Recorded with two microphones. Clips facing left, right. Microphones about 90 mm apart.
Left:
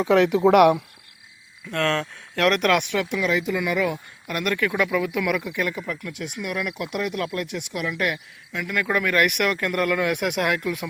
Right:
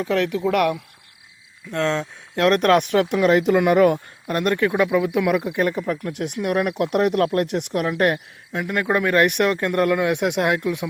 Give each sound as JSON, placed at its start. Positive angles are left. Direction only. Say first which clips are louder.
{"t": 0.0, "sound": "speech", "louder": "left 4 dB", "side_deg": 10}
{"t": 1.7, "sound": "speech", "louder": "right 1 dB", "side_deg": -20}
{"t": 2.5, "sound": "speech", "louder": "right 5 dB", "side_deg": -35}
{"t": 4.3, "sound": "speech", "louder": "right 4 dB", "side_deg": -30}